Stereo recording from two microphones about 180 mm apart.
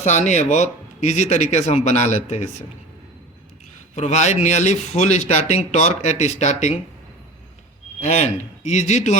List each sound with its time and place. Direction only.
0.0 s speech: 40° left (ahead or behind)
3.9 s speech: 40° left (ahead or behind)
8.0 s speech: 40° left (ahead or behind)